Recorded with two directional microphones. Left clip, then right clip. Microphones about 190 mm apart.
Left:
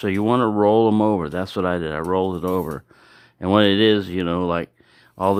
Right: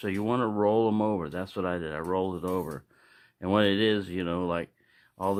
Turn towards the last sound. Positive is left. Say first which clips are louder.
# left 10 dB
turn(degrees=35)  # may be behind; listen again after turning